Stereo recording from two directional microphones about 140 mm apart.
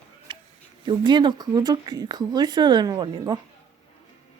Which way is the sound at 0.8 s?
35° right (ahead or behind).